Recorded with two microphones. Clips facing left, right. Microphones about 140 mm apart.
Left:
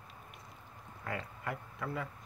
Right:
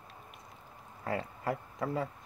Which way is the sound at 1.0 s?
35° right (ahead or behind).